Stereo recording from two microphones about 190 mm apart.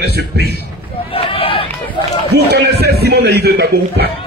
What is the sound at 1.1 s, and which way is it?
Hubbub, 30° left (ahead or behind).